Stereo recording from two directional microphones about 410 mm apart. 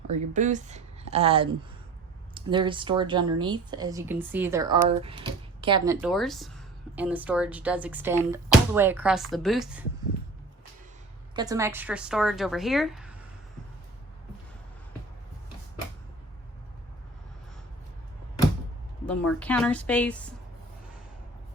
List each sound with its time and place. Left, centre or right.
0.1 s speech: centre
11.3 s speech: centre
19.0 s speech: centre